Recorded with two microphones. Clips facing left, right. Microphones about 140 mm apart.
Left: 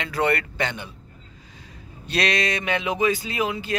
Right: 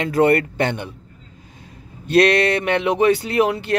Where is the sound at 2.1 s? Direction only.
55° right (ahead or behind).